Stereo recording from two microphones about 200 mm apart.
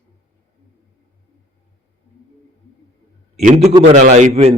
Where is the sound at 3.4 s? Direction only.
35° right (ahead or behind).